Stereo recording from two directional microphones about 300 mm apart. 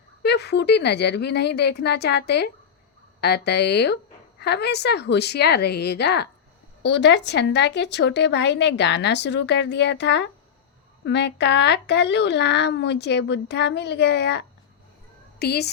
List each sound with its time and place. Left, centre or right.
0.2 s a woman's voice: left